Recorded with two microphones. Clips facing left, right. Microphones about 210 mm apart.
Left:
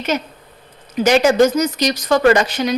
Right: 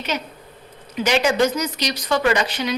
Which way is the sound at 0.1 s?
45° left (ahead or behind).